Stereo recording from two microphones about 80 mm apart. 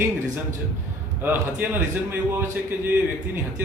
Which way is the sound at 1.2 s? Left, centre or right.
Right.